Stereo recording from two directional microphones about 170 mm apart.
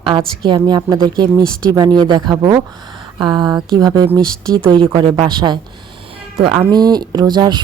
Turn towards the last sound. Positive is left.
turn(degrees=-25)  # may be behind; listen again after turning